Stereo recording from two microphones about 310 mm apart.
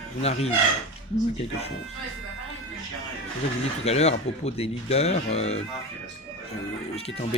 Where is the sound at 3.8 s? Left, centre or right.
Left.